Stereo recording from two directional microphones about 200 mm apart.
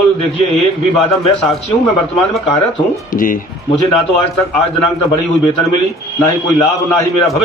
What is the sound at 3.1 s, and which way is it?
Speech, 45° left (ahead or behind).